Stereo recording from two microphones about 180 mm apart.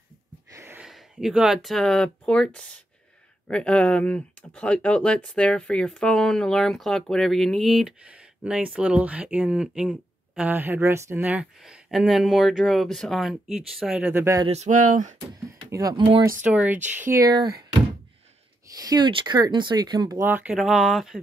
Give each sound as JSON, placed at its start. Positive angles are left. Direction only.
{"t": 0.5, "sound": "a sound", "side_deg": -15}
{"t": 0.8, "sound": "speech", "side_deg": -5}
{"t": 14.5, "sound": "speech", "side_deg": -40}
{"t": 15.7, "sound": "speech", "side_deg": -20}
{"t": 16.4, "sound": "speech", "side_deg": -10}
{"t": 18.8, "sound": "speech", "side_deg": -20}
{"t": 20.2, "sound": "speech", "side_deg": -10}